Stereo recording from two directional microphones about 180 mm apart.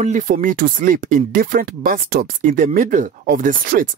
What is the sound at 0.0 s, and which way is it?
Speech, 45° right (ahead or behind).